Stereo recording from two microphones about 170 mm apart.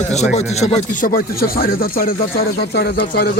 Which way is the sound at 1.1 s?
60° left (ahead or behind).